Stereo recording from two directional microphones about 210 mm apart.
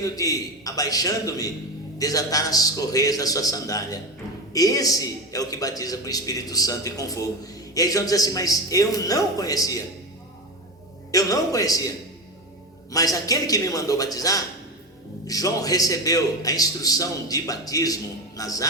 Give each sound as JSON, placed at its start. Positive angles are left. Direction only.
{"t": 0.0, "sound": "a man's voice", "side_deg": 15}
{"t": 11.1, "sound": "a man's voice", "side_deg": 15}
{"t": 12.9, "sound": "a man's voice", "side_deg": 15}